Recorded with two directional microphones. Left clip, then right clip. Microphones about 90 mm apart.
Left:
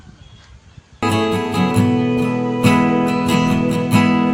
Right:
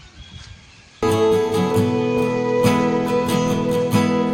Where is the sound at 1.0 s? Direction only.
20° left (ahead or behind).